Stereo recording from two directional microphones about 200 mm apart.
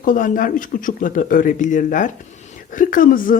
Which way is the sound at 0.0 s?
40° left (ahead or behind).